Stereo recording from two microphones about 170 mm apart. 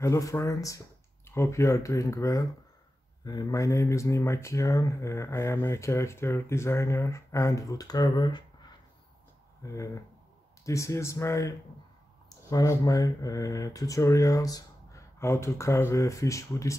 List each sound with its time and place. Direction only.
0.0 s speech: 20° left (ahead or behind)
9.6 s speech: 20° left (ahead or behind)